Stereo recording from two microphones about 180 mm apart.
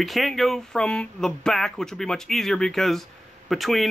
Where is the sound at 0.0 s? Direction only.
Centre (ahead or behind).